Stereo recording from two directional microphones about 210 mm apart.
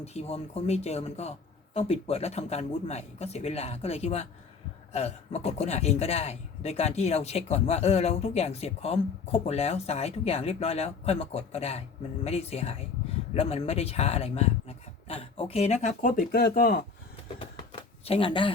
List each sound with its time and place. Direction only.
0.0 s speech: 30° left (ahead or behind); by 16.8 s 45° left (ahead or behind)
17.4 s shuffling cards: 25° left (ahead or behind)